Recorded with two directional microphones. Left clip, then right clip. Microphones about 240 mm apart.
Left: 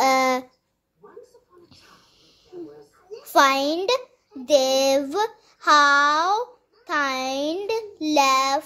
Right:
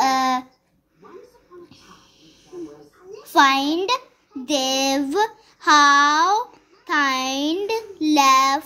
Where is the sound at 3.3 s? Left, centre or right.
Left.